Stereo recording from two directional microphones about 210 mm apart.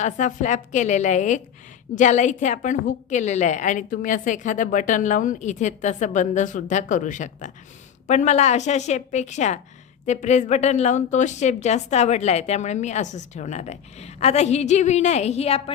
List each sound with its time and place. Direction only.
0.0 s a woman's voice: 35° left (ahead or behind)